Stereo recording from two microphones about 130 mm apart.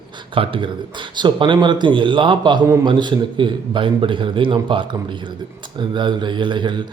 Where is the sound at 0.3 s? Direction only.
40° right (ahead or behind).